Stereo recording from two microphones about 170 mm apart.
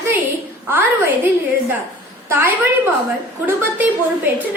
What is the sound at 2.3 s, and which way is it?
A woman's voice, 10° right (ahead or behind).